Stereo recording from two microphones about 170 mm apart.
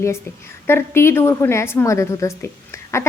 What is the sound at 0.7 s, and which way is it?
A woman's voice, 15° left (ahead or behind).